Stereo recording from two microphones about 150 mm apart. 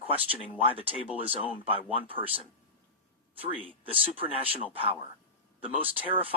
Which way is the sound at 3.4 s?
35° right (ahead or behind).